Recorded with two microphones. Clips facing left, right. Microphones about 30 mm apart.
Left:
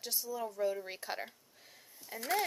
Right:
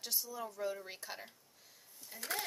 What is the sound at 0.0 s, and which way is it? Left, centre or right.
Speech, centre.